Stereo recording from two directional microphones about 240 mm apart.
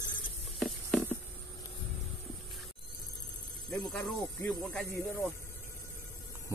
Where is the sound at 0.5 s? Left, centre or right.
Centre.